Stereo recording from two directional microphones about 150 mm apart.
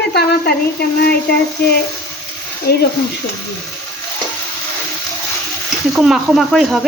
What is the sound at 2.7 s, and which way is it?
Speech, 90° left.